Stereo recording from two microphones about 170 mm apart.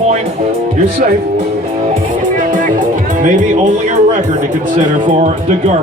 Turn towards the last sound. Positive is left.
turn(degrees=-45)  # may be behind; listen again after turning